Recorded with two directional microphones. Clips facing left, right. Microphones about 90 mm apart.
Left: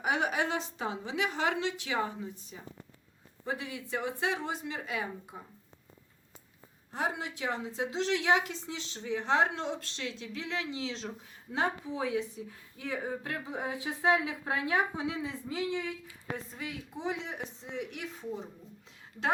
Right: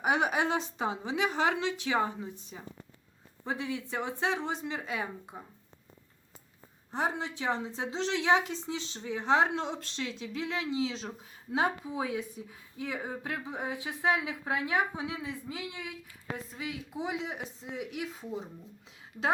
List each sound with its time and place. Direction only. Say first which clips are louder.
0.0 s speech: right 2 dB; 20° right (ahead or behind)
6.9 s a woman's voice: right 2 dB; 30° right (ahead or behind); by 18.4 s 10° right (ahead or behind)